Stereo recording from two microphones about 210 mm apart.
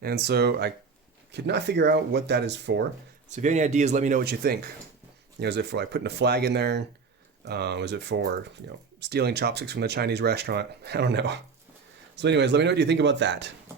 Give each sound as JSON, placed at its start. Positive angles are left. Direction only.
{"t": 0.0, "sound": "speech", "side_deg": -50}
{"t": 3.2, "sound": "speech", "side_deg": -35}
{"t": 4.2, "sound": "speech", "side_deg": -50}